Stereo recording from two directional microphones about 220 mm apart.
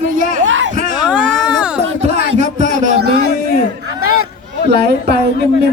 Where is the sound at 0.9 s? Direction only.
5° right (ahead or behind).